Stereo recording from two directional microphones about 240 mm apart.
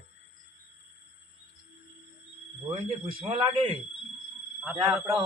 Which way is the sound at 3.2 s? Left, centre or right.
Right.